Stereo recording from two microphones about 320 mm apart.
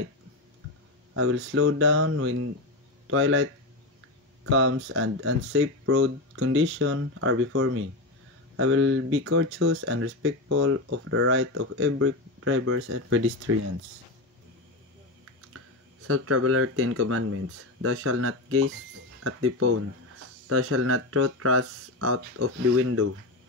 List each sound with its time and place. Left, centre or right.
1.1 s speech: right
4.5 s speech: right
16.1 s speech: right